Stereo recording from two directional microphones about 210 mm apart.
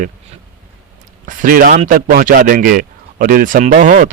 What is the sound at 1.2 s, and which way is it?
A man's voice, 40° right (ahead or behind).